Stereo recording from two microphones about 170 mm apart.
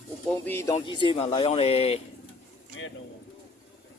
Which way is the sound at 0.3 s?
15° left (ahead or behind).